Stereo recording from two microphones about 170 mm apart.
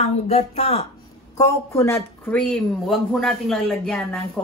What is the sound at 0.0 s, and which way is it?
Speech, 40° left (ahead or behind).